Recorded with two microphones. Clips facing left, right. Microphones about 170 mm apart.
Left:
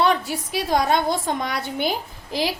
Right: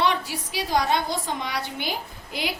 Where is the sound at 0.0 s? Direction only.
50° left (ahead or behind).